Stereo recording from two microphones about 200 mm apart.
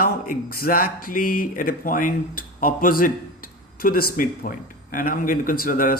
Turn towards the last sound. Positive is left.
turn(degrees=45)  # may be behind; listen again after turning